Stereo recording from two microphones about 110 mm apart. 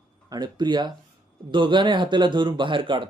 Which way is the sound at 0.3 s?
40° right (ahead or behind).